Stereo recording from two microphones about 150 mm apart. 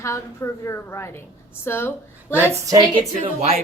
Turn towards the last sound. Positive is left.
turn(degrees=-40)  # may be behind; listen again after turning